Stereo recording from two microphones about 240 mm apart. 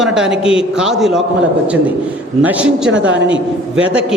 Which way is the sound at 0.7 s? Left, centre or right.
Centre.